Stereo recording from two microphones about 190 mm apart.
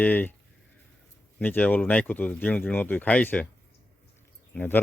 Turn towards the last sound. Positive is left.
turn(degrees=10)  # may be behind; listen again after turning